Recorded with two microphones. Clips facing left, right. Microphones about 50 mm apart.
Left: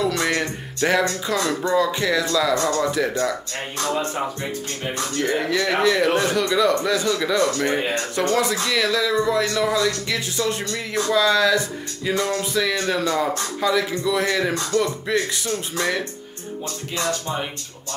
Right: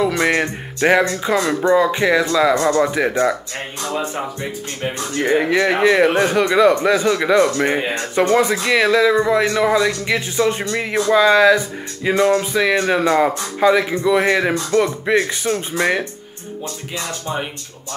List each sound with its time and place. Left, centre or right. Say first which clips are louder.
0.0 s speech: right 5 dB; right
3.9 s speech: right 2 dB; centre
5.1 s speech: right 6 dB; right